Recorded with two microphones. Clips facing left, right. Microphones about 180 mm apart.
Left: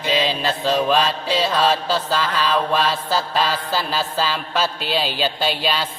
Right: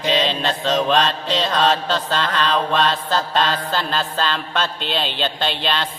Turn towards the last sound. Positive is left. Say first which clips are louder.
# left 1 dB
turn(degrees=5)  # may be behind; listen again after turning